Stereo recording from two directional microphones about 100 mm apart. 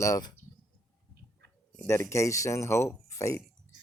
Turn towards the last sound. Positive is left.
turn(degrees=30)  # may be behind; listen again after turning